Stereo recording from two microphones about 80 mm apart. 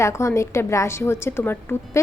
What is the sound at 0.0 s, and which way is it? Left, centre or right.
Speech, left.